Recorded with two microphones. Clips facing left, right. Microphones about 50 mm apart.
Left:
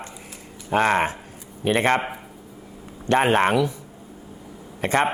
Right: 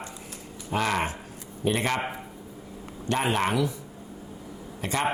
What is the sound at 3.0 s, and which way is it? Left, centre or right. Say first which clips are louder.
Speech: left 7 dB; left.